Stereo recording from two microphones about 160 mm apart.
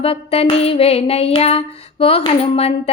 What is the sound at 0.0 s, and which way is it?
Speech, 35° left (ahead or behind).